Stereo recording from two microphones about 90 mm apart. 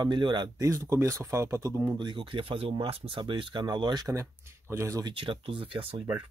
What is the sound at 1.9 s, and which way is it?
Speech, 60° right (ahead or behind).